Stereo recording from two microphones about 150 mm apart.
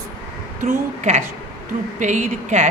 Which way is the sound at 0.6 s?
60° right (ahead or behind).